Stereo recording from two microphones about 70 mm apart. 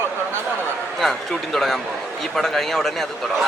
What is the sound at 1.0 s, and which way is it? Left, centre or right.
A man's voice, centre.